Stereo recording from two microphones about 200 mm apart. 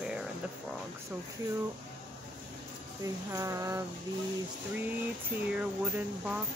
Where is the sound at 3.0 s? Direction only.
15° right (ahead or behind).